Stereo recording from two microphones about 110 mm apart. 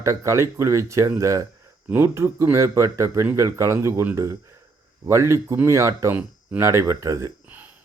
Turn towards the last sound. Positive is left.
turn(degrees=-15)  # may be behind; listen again after turning